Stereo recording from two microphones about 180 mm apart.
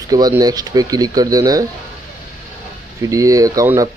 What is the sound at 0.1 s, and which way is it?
Speech, 20° right (ahead or behind).